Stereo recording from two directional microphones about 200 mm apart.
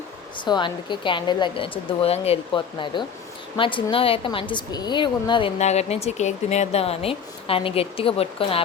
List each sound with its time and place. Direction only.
0.3 s a woman's voice: 20° left (ahead or behind)